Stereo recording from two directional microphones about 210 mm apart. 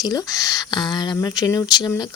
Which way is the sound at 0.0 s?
15° left (ahead or behind).